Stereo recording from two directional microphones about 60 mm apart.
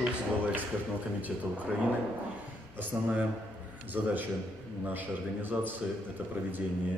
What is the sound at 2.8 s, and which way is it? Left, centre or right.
A man's voice, right.